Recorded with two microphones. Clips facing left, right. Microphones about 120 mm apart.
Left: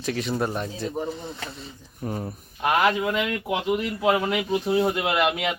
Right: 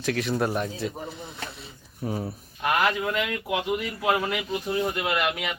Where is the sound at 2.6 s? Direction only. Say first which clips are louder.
Left 3 dB; 25° left (ahead or behind).